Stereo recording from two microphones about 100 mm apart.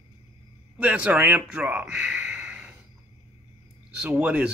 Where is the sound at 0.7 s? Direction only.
10° right (ahead or behind).